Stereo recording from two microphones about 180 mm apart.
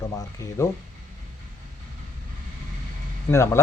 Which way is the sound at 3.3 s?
15° left (ahead or behind).